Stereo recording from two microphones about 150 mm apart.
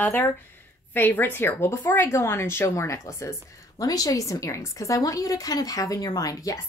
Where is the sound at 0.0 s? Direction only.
10° left (ahead or behind).